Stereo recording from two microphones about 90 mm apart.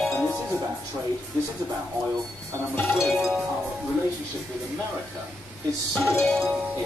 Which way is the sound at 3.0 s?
Centre (ahead or behind).